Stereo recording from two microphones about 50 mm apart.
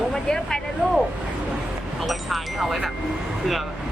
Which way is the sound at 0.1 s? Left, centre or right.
Centre.